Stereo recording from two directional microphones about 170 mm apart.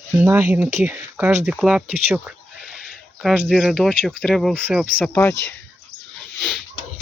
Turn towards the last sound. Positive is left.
turn(degrees=0)  # may be behind; listen again after turning